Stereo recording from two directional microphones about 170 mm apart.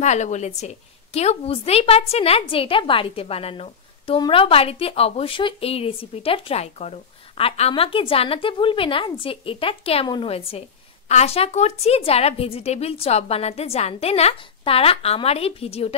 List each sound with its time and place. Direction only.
0.0 s a woman's voice: 45° left (ahead or behind)